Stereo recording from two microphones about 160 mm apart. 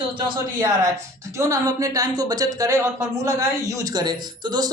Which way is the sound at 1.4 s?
20° right (ahead or behind).